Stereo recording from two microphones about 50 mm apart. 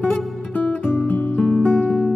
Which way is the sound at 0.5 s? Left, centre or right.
Left.